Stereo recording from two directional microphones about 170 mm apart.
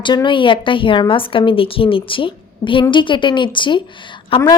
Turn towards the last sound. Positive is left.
turn(degrees=25)  # may be behind; listen again after turning